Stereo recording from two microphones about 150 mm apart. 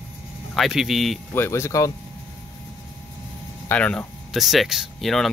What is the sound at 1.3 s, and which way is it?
Speech, 15° left (ahead or behind).